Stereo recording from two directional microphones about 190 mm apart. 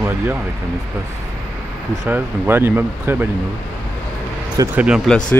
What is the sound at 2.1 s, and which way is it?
Speech, 10° right (ahead or behind).